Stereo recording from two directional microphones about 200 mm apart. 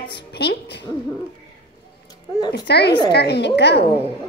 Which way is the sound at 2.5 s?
55° left (ahead or behind).